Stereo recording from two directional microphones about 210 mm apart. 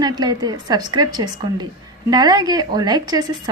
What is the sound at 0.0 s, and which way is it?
A woman's voice, 20° right (ahead or behind).